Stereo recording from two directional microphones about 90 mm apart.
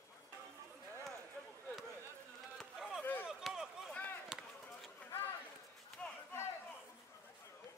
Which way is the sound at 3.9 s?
20° left (ahead or behind).